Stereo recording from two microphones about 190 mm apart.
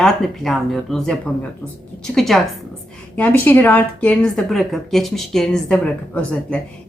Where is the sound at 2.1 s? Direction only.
Centre (ahead or behind).